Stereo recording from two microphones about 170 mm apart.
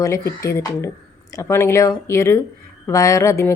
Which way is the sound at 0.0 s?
15° left (ahead or behind).